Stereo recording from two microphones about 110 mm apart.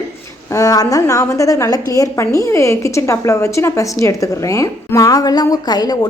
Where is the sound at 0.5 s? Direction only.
30° left (ahead or behind).